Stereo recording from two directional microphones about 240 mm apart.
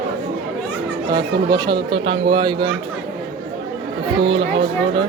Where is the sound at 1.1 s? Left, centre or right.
Centre.